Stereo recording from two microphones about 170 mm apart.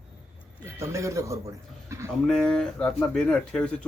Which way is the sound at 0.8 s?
15° right (ahead or behind).